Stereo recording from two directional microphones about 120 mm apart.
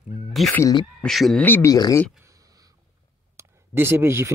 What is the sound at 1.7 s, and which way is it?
Speech, 30° left (ahead or behind).